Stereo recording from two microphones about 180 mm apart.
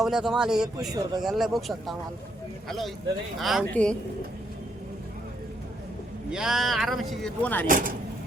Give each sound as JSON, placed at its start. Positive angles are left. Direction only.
{"t": 0.0, "sound": "speech", "side_deg": 0}
{"t": 6.3, "sound": "speech", "side_deg": 0}
{"t": 7.7, "sound": "speech", "side_deg": -50}